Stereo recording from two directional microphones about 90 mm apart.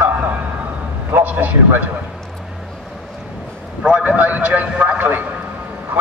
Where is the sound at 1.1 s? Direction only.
20° right (ahead or behind).